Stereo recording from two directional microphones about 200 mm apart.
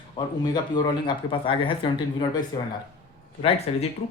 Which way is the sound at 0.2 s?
20° left (ahead or behind).